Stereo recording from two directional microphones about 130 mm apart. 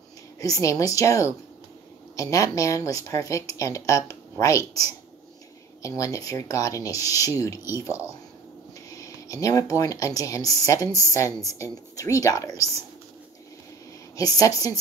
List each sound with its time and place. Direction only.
0.4 s speech: 25° left (ahead or behind)
8.9 s a sound: 25° left (ahead or behind)
9.8 s speech: 25° left (ahead or behind)
14.1 s speech: 30° left (ahead or behind)